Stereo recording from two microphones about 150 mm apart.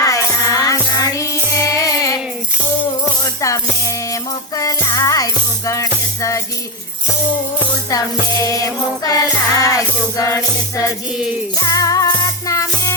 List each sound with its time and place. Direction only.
0.0 s music: 20° left (ahead or behind)
3.2 s music: 20° left (ahead or behind)
8.4 s music: 25° left (ahead or behind)